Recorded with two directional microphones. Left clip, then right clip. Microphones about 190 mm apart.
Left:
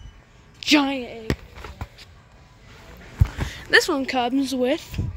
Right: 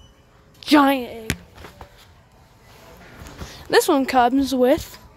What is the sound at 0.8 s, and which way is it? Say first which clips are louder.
Speech: right 7 dB; 35° right (ahead or behind).